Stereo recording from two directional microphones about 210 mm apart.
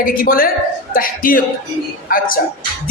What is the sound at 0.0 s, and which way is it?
Music, 45° left (ahead or behind).